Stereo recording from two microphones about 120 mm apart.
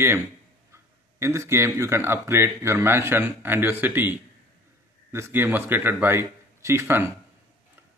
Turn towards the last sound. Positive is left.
turn(degrees=-20)  # may be behind; listen again after turning